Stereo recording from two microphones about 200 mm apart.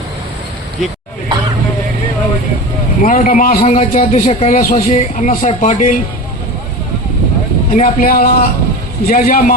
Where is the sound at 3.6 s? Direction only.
30° left (ahead or behind).